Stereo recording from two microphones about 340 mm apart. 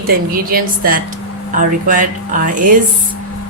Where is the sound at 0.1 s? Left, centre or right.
Right.